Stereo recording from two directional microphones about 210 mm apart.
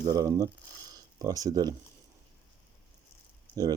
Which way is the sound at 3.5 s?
10° left (ahead or behind).